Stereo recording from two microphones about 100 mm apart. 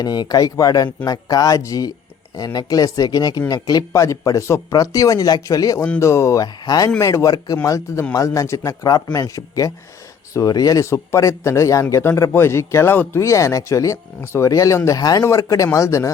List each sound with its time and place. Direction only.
0.0 s a man's voice: 40° left (ahead or behind)
15.2 s a man's voice: 30° left (ahead or behind)